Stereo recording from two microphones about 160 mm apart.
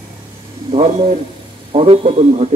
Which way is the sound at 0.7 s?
35° right (ahead or behind).